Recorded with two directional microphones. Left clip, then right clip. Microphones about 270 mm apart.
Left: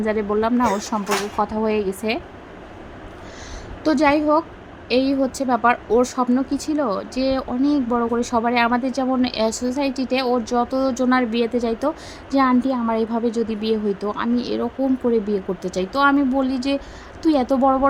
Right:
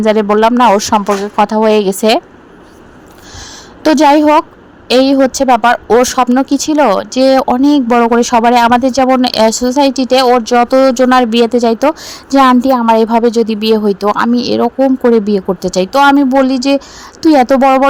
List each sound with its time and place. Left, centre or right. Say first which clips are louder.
0.0 s speech: right 12 dB; right
3.8 s speech: right 10 dB; right